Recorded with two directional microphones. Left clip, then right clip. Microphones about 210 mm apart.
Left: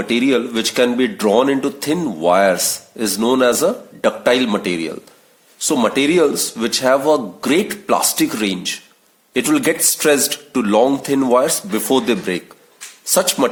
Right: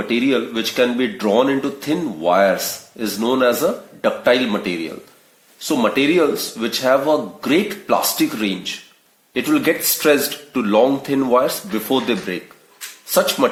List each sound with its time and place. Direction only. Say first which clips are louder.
0.0 s speech: left 2 dB; 40° left (ahead or behind)